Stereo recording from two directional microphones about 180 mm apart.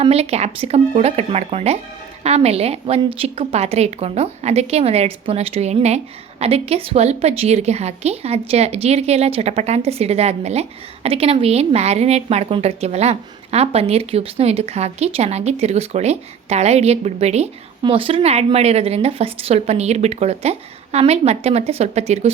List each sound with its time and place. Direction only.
0.0 s a woman's voice: 35° right (ahead or behind)